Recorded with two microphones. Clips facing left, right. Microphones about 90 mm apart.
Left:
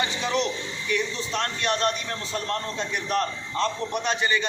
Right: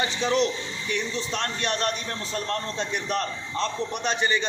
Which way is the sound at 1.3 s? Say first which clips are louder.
Left 3 dB; 40° left (ahead or behind).